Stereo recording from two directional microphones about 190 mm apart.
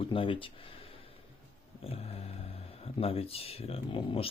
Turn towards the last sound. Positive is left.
turn(degrees=30)  # may be behind; listen again after turning